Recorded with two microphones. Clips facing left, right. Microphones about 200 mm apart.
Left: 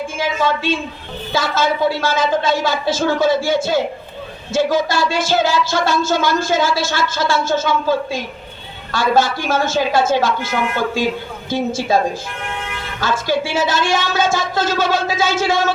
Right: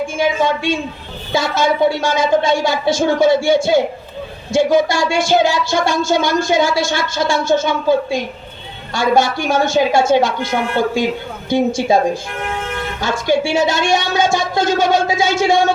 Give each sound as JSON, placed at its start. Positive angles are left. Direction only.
{"t": 0.2, "sound": "a woman's voice", "side_deg": -15}
{"t": 11.4, "sound": "a woman's voice", "side_deg": -15}
{"t": 13.0, "sound": "a woman's voice", "side_deg": -15}